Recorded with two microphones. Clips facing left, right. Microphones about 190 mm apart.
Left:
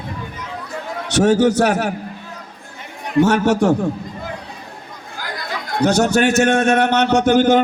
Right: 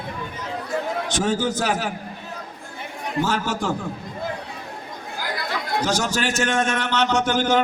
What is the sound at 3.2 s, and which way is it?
Speech, 75° left (ahead or behind).